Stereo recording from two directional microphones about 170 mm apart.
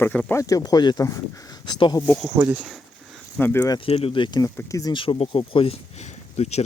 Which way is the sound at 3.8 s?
35° left (ahead or behind).